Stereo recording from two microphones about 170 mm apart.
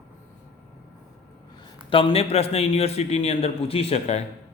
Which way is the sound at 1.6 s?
30° left (ahead or behind).